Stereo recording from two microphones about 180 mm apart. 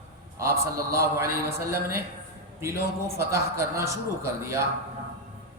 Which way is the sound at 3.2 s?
15° right (ahead or behind).